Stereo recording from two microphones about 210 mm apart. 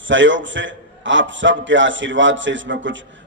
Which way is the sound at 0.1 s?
60° right (ahead or behind).